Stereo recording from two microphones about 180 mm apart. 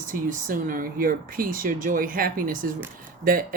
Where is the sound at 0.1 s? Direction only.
45° right (ahead or behind).